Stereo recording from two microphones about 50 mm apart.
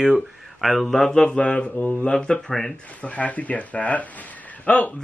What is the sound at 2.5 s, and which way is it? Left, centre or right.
Speech, centre.